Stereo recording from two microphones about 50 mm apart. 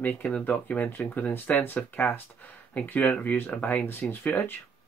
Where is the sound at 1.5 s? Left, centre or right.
Left.